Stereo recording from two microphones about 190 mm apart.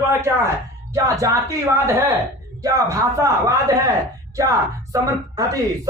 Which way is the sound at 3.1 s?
15° right (ahead or behind).